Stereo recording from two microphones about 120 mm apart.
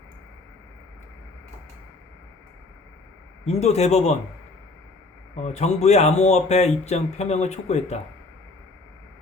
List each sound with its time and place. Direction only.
3.4 s speech: 65° left (ahead or behind)
5.4 s speech: 70° left (ahead or behind)